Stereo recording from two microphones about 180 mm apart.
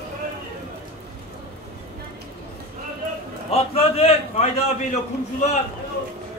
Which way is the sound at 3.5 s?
35° left (ahead or behind).